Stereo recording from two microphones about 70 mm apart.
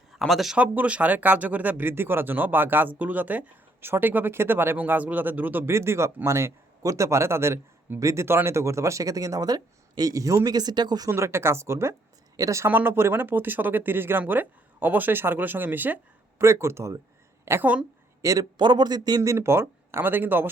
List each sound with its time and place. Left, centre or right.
0.1 s speech: centre
0.5 s speech: right
5.7 s a man's voice: right
11.1 s a man's voice: right
12.6 s speech: right
16.4 s a man's voice: right
18.2 s speech: right
19.2 s speech: right